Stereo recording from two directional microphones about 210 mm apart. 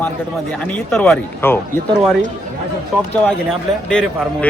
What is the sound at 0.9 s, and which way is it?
Speech, 5° left (ahead or behind).